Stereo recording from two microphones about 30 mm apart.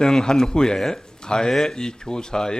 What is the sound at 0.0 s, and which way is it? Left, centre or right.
Speech, left.